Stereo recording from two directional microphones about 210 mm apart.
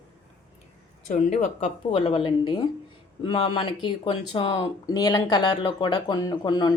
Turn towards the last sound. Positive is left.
turn(degrees=20)  # may be behind; listen again after turning